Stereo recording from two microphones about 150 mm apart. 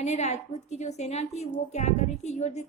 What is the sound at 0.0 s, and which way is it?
A woman's voice, 45° left (ahead or behind).